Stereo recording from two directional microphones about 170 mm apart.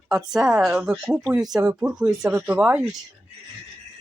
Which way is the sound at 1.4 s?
20° right (ahead or behind).